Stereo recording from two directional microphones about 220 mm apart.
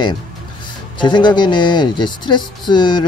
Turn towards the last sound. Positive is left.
turn(degrees=20)  # may be behind; listen again after turning